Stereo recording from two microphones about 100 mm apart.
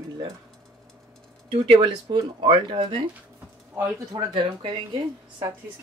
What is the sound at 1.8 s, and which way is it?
Speech, 45° right (ahead or behind).